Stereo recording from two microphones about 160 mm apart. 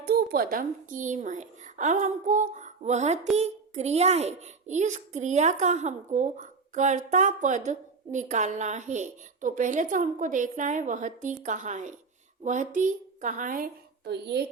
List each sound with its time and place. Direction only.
0.0 s a child's voice: 70° right (ahead or behind); by 14.4 s 90° right